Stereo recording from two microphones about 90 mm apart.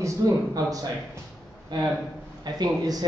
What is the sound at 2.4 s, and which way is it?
Speech, 50° right (ahead or behind).